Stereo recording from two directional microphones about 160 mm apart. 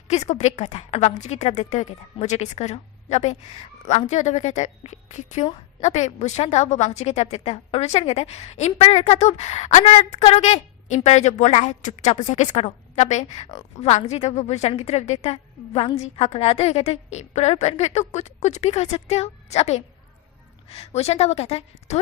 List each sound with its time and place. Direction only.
0.1 s a woman's voice: 45° left (ahead or behind)